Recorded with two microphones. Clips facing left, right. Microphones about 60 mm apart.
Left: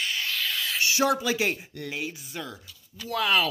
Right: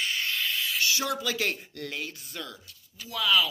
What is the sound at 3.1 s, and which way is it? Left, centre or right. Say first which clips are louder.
Speech: left 1 dB; left.